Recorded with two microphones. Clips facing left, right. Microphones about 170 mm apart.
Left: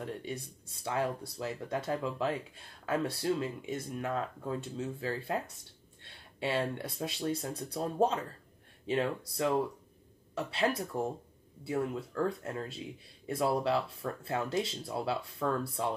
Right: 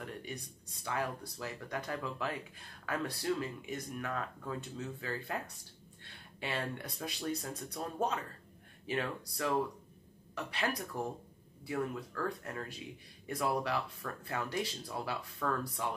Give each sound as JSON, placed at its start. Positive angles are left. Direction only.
{"t": 0.0, "sound": "speech", "side_deg": 25}